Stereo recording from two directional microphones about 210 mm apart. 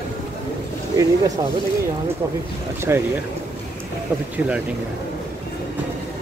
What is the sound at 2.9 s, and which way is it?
Speech, 10° right (ahead or behind).